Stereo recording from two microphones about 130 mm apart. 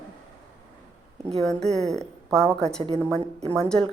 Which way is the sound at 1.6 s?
60° right (ahead or behind).